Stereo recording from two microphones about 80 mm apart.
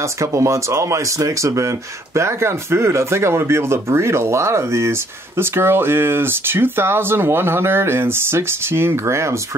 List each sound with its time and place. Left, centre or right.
0.2 s speech: right